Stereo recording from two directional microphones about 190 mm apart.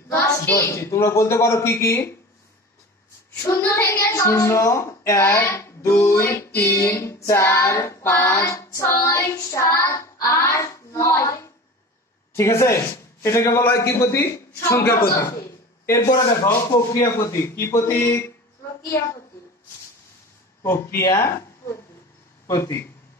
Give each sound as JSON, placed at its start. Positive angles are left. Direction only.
{"t": 0.1, "sound": "child singing", "side_deg": 15}
{"t": 3.4, "sound": "child singing", "side_deg": 15}
{"t": 12.4, "sound": "a man's voice", "side_deg": 15}
{"t": 13.8, "sound": "child singing", "side_deg": 15}
{"t": 15.9, "sound": "child singing", "side_deg": 15}
{"t": 20.6, "sound": "child singing", "side_deg": 15}